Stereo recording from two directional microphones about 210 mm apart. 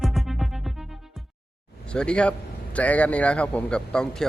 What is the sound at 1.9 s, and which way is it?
Speech, 5° left (ahead or behind).